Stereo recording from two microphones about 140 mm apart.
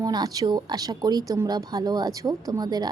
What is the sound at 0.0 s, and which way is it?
A woman's voice, 25° right (ahead or behind).